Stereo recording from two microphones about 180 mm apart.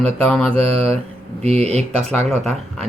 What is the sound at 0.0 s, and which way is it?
Speech, 5° left (ahead or behind).